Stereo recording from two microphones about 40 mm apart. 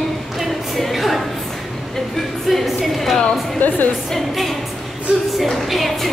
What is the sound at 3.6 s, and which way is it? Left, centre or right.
Speech, left.